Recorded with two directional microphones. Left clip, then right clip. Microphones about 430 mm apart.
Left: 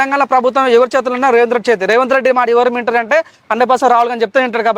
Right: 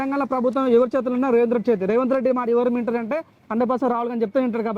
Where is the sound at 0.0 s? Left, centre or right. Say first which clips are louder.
Left 11 dB; centre.